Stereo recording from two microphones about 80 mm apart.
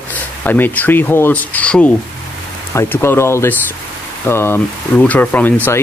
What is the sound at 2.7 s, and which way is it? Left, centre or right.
Speech, left.